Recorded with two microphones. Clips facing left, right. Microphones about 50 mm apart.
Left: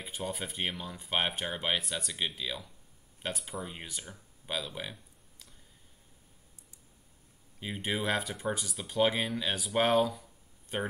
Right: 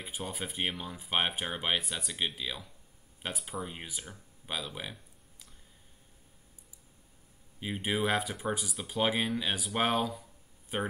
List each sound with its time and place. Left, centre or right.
0.0 s speech: centre
7.6 s speech: centre